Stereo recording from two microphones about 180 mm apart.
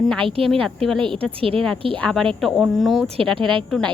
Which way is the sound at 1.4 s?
30° right (ahead or behind).